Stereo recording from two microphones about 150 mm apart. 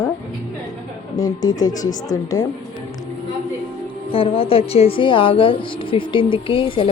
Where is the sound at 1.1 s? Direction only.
25° left (ahead or behind).